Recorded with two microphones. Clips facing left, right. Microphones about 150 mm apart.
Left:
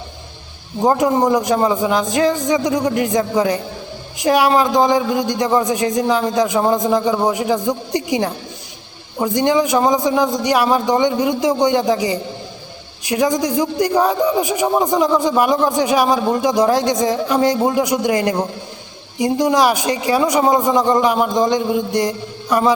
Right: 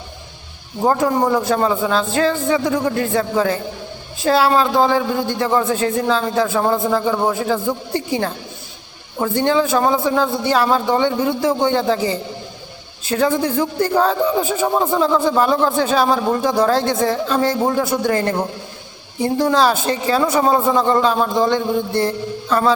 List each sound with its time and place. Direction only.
0.9 s speech: 20° left (ahead or behind)